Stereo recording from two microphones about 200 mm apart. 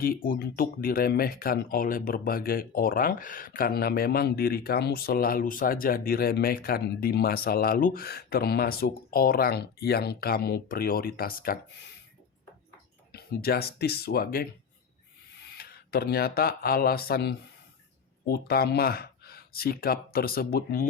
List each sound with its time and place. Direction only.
0.0 s speech: 45° left (ahead or behind)
13.1 s speech: 50° left (ahead or behind)
15.5 s speech: 50° left (ahead or behind)